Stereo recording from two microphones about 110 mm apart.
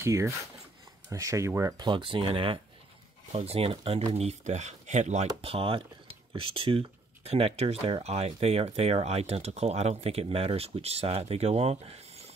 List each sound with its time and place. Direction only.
0.0 s speech: 25° right (ahead or behind)
1.9 s speech: 50° right (ahead or behind)
4.1 s speech: 75° right (ahead or behind)